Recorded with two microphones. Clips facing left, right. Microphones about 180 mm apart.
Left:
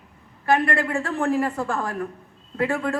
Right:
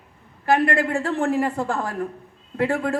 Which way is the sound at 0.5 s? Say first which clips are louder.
Right 2 dB; 25° right (ahead or behind).